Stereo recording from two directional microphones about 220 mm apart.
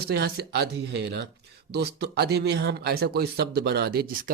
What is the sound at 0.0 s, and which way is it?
Speech, 45° right (ahead or behind).